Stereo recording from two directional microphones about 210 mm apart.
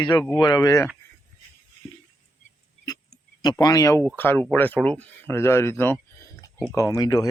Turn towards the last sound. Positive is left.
turn(degrees=15)  # may be behind; listen again after turning